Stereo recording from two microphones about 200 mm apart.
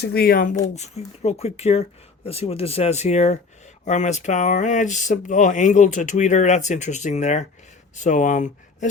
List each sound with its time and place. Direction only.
0.0 s speech: 50° left (ahead or behind)
0.6 s speech: 35° left (ahead or behind)